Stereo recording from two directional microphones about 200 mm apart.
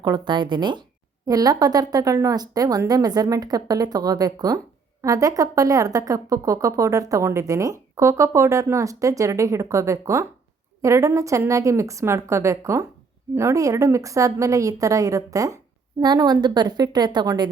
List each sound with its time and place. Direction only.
0.0 s a woman's voice: 20° right (ahead or behind)